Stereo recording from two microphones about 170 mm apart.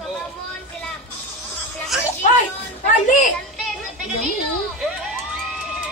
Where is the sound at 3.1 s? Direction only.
50° left (ahead or behind).